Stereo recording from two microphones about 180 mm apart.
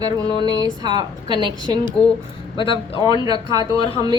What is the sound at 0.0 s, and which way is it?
A woman's voice, 20° right (ahead or behind).